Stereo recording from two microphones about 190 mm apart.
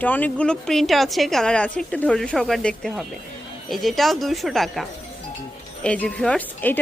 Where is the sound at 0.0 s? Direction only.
10° left (ahead or behind).